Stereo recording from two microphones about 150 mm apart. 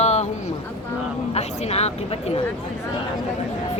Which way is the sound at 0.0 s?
50° left (ahead or behind).